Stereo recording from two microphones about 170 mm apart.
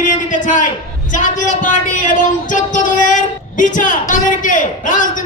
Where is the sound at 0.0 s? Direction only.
50° left (ahead or behind).